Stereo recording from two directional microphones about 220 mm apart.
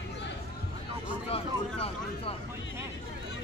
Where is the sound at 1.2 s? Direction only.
25° left (ahead or behind).